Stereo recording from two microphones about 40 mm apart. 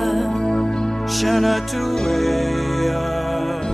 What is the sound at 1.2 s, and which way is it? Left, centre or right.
Music, centre.